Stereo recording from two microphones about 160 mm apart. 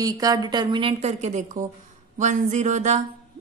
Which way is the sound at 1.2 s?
50° right (ahead or behind).